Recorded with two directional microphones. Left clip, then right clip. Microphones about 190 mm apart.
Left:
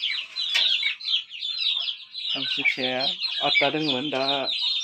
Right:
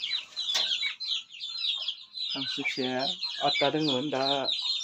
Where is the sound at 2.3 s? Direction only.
5° left (ahead or behind).